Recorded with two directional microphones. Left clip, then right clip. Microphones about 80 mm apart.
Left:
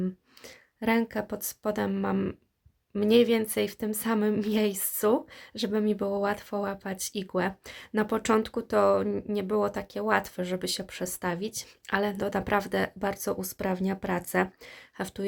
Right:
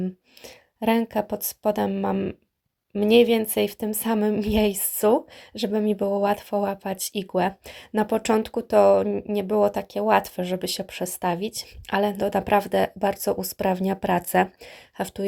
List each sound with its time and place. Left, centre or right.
0.4 s speech: right
3.0 s speech: right
9.0 s speech: centre
9.3 s speech: right